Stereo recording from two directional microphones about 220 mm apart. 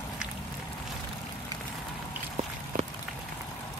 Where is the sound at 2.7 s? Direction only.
35° right (ahead or behind).